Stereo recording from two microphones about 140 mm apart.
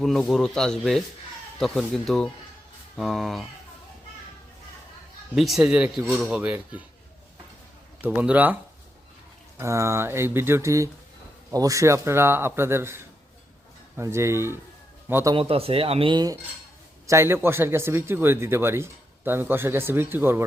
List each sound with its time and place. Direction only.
0.0 s speech: centre (ahead or behind)
5.3 s a man's voice: centre (ahead or behind)
8.0 s a man's voice: 10° right (ahead or behind)
9.6 s a man's voice: 20° right (ahead or behind)
15.4 s speech: 45° right (ahead or behind)
17.1 s a man's voice: 20° right (ahead or behind)